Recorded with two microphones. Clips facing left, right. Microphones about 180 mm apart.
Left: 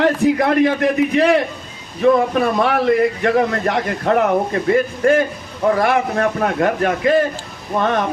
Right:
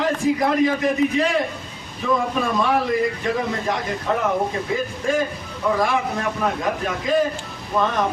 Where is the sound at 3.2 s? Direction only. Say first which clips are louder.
Left 7 dB; 70° left (ahead or behind).